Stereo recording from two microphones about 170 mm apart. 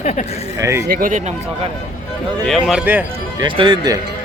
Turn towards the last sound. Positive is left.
turn(degrees=-30)  # may be behind; listen again after turning